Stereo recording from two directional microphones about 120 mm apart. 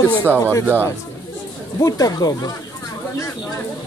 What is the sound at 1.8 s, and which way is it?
Speech, 30° left (ahead or behind).